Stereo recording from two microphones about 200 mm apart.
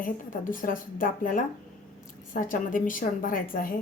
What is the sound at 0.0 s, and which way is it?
A woman's voice, 40° left (ahead or behind).